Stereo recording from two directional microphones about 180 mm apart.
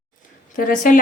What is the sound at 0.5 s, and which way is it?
Speech, 50° left (ahead or behind).